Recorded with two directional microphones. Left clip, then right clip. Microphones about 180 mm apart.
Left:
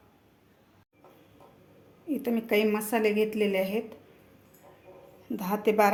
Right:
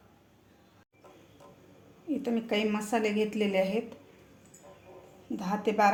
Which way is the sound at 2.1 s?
20° left (ahead or behind).